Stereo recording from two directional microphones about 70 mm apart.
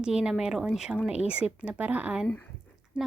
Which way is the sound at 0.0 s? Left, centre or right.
Centre.